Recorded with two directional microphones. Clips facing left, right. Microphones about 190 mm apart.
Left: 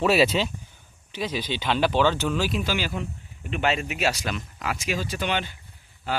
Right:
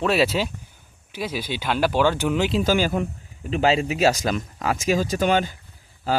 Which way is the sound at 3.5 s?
35° right (ahead or behind).